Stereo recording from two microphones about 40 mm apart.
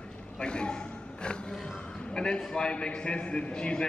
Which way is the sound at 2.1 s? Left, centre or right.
Centre.